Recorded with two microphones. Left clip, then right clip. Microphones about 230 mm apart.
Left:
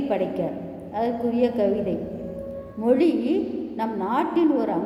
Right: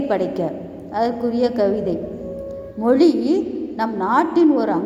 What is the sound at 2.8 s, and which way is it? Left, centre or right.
A woman's voice, centre.